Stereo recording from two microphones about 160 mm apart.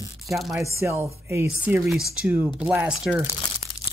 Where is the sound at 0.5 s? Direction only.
20° right (ahead or behind).